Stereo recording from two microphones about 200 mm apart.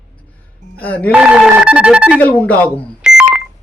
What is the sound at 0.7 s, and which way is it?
Speech, 5° left (ahead or behind).